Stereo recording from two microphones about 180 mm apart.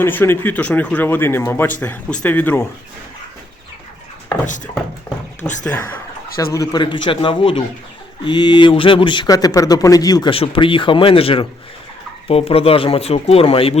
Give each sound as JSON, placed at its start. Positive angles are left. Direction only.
{"t": 0.0, "sound": "speech", "side_deg": 10}
{"t": 4.4, "sound": "speech", "side_deg": 45}
{"t": 5.6, "sound": "speech", "side_deg": 10}